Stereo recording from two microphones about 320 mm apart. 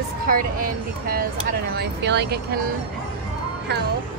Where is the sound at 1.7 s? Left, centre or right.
Right.